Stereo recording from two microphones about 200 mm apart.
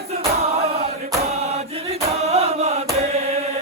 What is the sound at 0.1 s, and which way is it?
Choir, 30° right (ahead or behind).